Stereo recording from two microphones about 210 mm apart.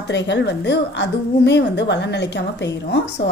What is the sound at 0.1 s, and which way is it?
A woman's voice, 55° left (ahead or behind).